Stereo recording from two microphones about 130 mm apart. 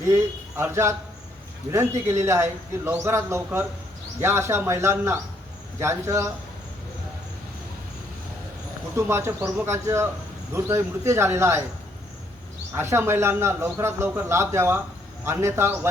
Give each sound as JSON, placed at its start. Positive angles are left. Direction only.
{"t": 0.0, "sound": "a man's voice", "side_deg": -20}
{"t": 9.0, "sound": "a man's voice", "side_deg": -20}
{"t": 12.7, "sound": "a man's voice", "side_deg": -20}